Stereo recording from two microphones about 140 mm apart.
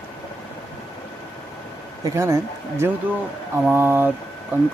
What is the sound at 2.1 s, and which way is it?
Speech, 20° right (ahead or behind).